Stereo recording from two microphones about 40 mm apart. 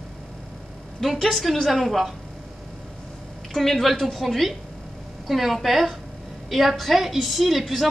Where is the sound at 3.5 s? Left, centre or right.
Centre.